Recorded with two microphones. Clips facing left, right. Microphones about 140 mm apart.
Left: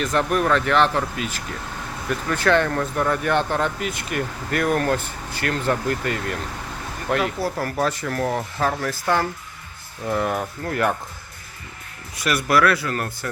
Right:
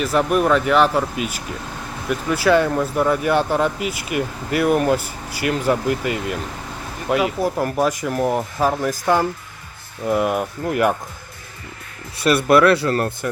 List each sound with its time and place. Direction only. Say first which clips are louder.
0.0 s speech: right 3 dB; 5° right (ahead or behind)
12.1 s speech: right 6 dB; 30° right (ahead or behind)